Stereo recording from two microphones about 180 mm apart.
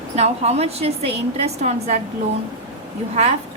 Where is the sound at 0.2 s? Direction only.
35° right (ahead or behind).